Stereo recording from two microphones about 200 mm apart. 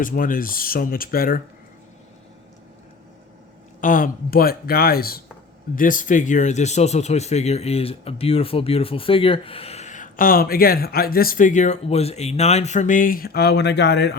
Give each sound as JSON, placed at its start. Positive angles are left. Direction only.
{"t": 0.0, "sound": "speech", "side_deg": 45}
{"t": 3.8, "sound": "speech", "side_deg": 40}